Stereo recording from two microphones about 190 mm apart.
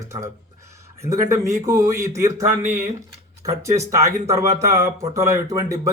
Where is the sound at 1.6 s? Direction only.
15° right (ahead or behind).